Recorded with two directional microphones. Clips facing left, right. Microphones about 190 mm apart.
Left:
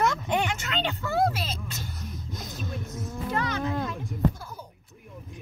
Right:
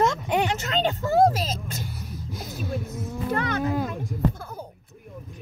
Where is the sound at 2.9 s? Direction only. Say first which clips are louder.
Even; 55° right (ahead or behind).